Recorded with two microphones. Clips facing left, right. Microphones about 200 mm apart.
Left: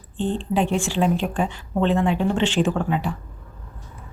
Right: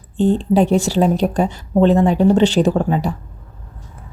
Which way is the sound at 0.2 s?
40° right (ahead or behind).